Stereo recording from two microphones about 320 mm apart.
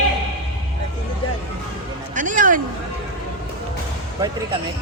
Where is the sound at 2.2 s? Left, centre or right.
Right.